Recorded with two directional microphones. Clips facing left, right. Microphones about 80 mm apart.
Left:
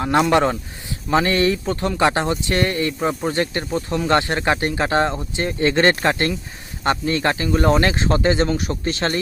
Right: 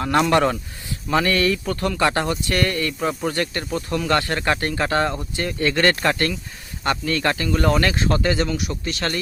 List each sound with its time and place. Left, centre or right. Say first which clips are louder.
0.2 s speech: left 1 dB; centre
8.4 s speech: left 4 dB; left